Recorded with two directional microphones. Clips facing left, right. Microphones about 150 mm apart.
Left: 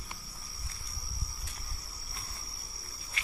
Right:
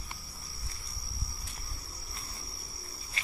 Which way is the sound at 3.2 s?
30° right (ahead or behind).